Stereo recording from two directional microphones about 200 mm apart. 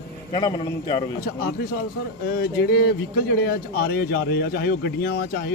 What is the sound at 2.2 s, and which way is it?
A man's voice, 50° left (ahead or behind).